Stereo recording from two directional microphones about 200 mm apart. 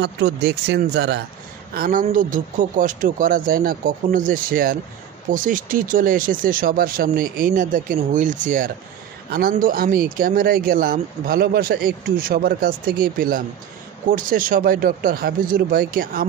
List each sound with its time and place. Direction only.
0.0 s speech: 55° right (ahead or behind)
1.7 s speech: 45° right (ahead or behind)